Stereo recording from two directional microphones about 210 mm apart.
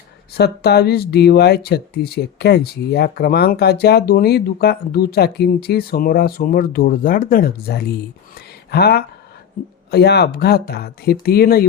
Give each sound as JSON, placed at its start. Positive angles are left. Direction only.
{"t": 0.3, "sound": "speech", "side_deg": 50}
{"t": 8.4, "sound": "a sound", "side_deg": 50}
{"t": 9.9, "sound": "speech", "side_deg": 50}